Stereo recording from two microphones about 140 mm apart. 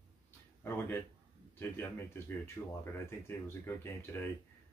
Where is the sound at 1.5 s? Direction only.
15° left (ahead or behind).